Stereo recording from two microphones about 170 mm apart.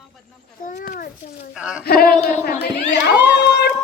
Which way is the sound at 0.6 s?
55° left (ahead or behind).